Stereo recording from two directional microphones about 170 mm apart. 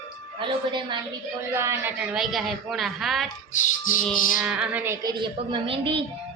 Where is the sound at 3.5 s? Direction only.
50° left (ahead or behind).